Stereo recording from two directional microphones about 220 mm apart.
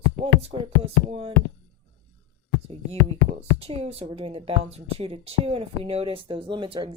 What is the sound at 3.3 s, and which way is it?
A woman's voice, 30° right (ahead or behind).